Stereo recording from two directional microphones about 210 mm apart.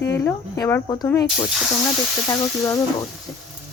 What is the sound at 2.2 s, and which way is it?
Speech, 15° left (ahead or behind).